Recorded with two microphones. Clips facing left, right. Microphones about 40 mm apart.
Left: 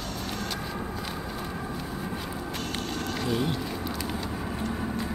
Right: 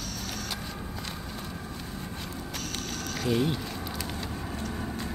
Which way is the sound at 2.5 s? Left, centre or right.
Left.